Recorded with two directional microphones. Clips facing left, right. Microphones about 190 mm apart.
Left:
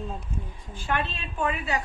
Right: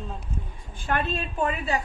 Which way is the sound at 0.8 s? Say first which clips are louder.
Right 3 dB; 50° right (ahead or behind).